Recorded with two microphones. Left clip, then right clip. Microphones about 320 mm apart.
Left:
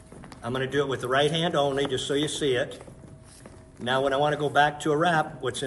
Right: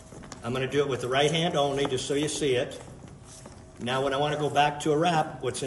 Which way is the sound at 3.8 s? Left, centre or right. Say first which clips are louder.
Left 3 dB; centre.